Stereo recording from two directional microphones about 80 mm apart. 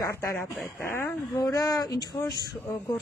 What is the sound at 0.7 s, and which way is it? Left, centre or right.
Speech, left.